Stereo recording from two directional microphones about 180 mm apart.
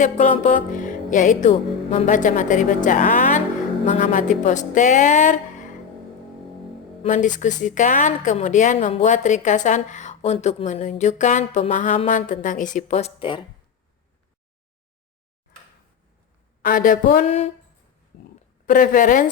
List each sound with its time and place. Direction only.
0.0 s music: 45° left (ahead or behind)
7.0 s music: 45° left (ahead or behind)
9.6 s speech: 40° left (ahead or behind)
12.0 s music: 45° left (ahead or behind); by 13.4 s 30° left (ahead or behind)
16.6 s music: 50° left (ahead or behind)
18.6 s music: 50° left (ahead or behind)